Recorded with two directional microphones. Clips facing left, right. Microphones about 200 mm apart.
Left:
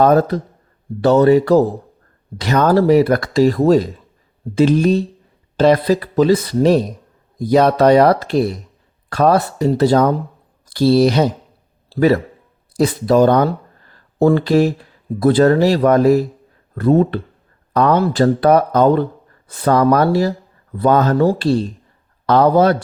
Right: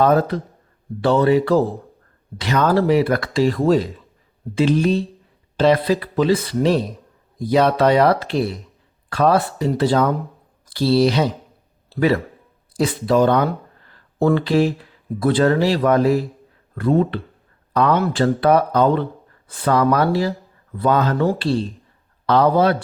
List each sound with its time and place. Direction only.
0.0 s a man's voice: 40° left (ahead or behind)